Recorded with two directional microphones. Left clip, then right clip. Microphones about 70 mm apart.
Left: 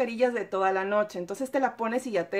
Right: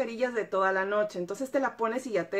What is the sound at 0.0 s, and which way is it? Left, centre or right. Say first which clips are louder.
Speech: left 4 dB; left.